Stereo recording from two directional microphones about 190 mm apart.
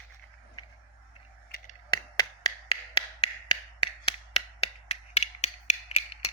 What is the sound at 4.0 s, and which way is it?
Finger snapping, 30° left (ahead or behind).